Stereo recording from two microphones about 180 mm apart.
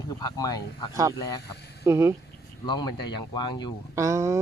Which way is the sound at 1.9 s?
15° right (ahead or behind).